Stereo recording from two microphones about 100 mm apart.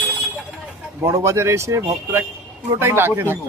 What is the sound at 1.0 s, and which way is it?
Speech, 25° right (ahead or behind).